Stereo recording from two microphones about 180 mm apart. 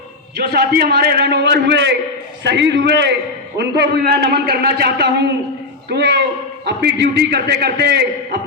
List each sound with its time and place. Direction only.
0.3 s a man's voice: 60° right (ahead or behind)